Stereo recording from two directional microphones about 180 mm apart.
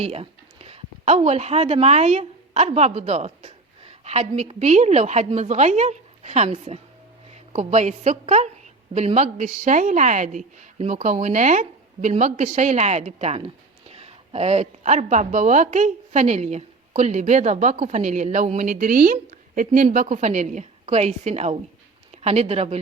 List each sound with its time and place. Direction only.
0.0 s a woman's voice: 35° right (ahead or behind)